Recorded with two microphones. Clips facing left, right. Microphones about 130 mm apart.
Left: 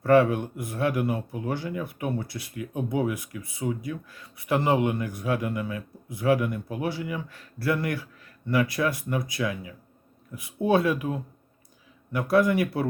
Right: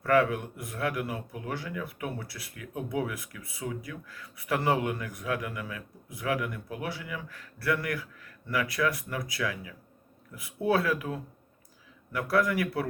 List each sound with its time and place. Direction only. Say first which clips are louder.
0.0 s speech: left 5 dB; 30° left (ahead or behind)